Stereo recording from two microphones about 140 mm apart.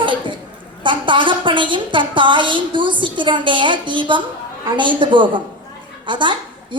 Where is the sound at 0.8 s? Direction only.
35° right (ahead or behind).